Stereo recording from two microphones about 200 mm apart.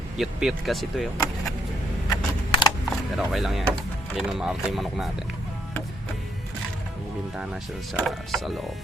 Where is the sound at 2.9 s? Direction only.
Centre (ahead or behind).